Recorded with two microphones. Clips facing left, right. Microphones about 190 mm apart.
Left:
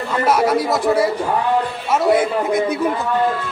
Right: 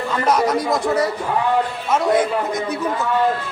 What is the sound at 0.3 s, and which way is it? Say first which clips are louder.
A man's voice: left 2 dB; 5° left (ahead or behind).